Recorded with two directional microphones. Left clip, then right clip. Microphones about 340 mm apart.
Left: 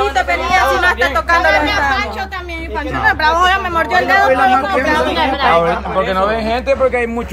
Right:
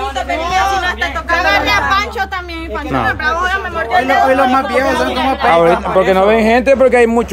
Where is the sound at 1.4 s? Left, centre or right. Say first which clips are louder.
Even; right.